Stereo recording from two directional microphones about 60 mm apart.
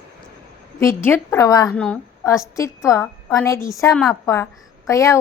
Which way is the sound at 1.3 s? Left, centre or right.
Left.